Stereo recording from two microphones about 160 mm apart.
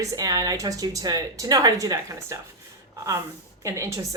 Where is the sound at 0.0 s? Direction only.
20° right (ahead or behind).